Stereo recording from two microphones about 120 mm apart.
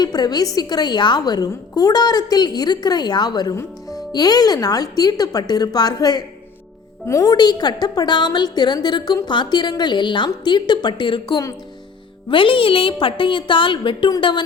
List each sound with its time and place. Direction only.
0.0 s a woman's voice: 35° left (ahead or behind)